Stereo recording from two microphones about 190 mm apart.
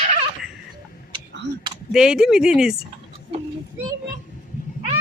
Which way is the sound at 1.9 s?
5° right (ahead or behind).